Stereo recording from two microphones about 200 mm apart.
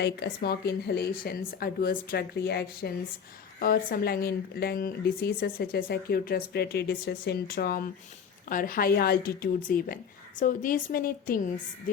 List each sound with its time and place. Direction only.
0.0 s speech: 55° left (ahead or behind)